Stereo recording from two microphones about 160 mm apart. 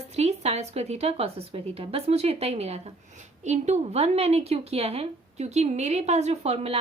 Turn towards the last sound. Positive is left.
turn(degrees=-40)  # may be behind; listen again after turning